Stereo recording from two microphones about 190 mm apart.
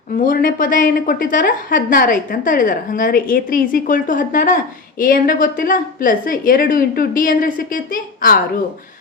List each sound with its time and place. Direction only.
0.1 s a woman's voice: 45° left (ahead or behind)